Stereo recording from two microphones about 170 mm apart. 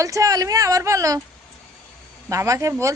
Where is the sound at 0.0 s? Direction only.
20° right (ahead or behind).